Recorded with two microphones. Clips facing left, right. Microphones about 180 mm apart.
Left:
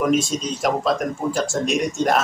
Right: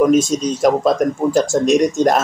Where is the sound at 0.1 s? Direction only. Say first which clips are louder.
Right 6 dB; 45° right (ahead or behind).